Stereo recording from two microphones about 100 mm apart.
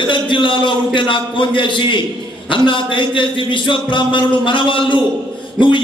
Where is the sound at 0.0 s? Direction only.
55° left (ahead or behind).